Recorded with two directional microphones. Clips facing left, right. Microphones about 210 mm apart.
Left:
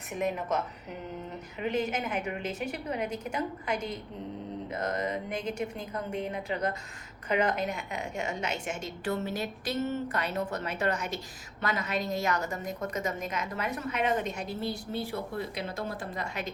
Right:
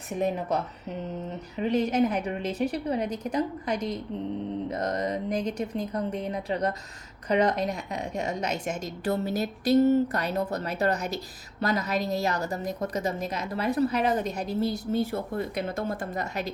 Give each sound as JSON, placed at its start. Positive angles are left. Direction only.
{"t": 0.1, "sound": "a woman's voice", "side_deg": -35}